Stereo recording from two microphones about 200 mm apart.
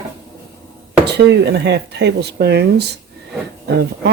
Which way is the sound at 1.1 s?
55° right (ahead or behind).